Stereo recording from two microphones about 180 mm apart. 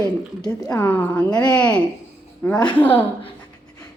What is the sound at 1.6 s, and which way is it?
A woman's voice, 5° left (ahead or behind).